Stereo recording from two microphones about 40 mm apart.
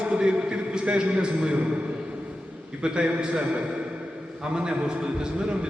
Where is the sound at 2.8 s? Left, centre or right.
Right.